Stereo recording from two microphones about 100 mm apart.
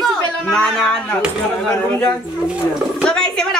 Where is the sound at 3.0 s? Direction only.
10° left (ahead or behind).